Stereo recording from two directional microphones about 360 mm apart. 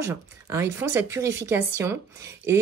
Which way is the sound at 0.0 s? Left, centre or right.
Centre.